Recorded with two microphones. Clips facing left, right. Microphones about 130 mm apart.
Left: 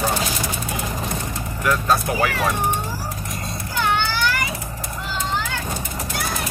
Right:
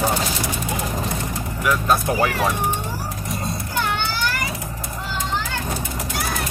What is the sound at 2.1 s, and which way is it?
Speech, 25° right (ahead or behind).